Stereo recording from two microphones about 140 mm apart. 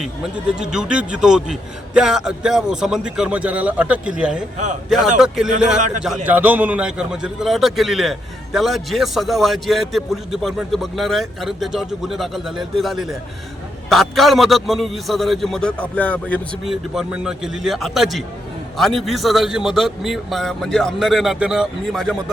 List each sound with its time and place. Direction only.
0.6 s a man's voice: 5° right (ahead or behind)
4.5 s a man's voice: 60° right (ahead or behind)
4.9 s a man's voice: 5° right (ahead or behind)
16.6 s a man's voice: centre (ahead or behind)